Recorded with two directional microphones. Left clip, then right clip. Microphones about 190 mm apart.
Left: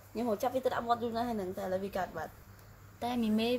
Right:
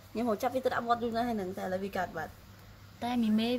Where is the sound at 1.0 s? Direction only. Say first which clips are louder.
Right 2 dB; 30° right (ahead or behind).